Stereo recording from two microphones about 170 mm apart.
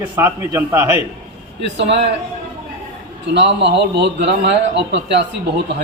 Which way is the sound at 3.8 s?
90° right.